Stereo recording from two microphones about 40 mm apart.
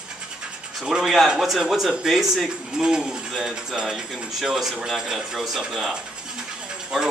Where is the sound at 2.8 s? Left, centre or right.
Centre.